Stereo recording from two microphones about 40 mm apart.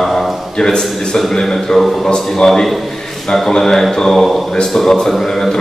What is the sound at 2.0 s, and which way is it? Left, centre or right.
A man's voice, centre.